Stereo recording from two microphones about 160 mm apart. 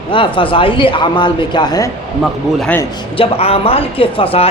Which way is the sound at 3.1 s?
35° left (ahead or behind).